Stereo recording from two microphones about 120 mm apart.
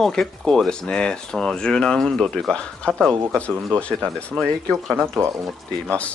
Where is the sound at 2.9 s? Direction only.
20° right (ahead or behind).